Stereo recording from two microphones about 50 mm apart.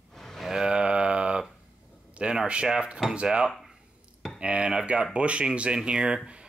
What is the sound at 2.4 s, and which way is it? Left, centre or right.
Speech, centre.